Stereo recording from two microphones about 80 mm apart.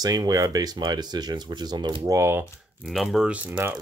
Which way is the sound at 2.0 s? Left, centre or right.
Right.